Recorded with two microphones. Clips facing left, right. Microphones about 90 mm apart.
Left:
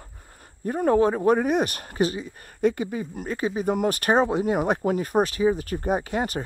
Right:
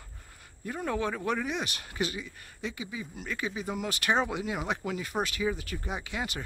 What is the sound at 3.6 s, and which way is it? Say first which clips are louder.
Speech: left 8 dB; 50° left (ahead or behind).